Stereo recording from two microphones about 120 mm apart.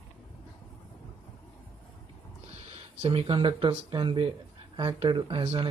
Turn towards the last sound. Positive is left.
turn(degrees=-40)  # may be behind; listen again after turning